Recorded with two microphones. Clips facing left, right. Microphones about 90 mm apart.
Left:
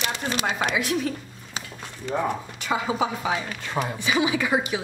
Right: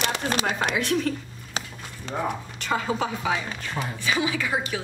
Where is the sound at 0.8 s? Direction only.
5° left (ahead or behind).